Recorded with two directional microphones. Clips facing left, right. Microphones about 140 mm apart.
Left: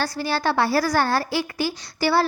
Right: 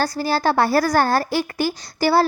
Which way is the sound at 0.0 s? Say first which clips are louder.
Right 4 dB; 40° right (ahead or behind).